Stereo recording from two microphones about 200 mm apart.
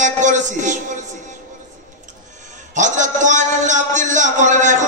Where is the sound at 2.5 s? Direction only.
40° right (ahead or behind).